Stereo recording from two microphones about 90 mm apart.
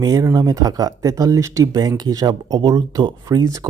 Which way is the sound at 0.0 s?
40° right (ahead or behind).